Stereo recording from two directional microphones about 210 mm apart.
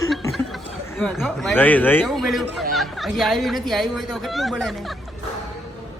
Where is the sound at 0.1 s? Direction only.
Centre (ahead or behind).